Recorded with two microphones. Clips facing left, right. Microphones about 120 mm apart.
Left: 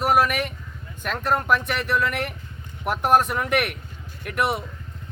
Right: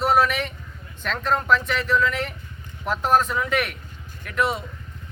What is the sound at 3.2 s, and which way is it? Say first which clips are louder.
Speech: left 1 dB; 60° left (ahead or behind).